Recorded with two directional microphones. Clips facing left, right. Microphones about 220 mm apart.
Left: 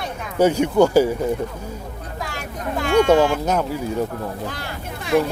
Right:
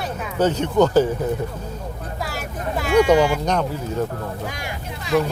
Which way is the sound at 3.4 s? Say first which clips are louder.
Left 1 dB; 5° left (ahead or behind).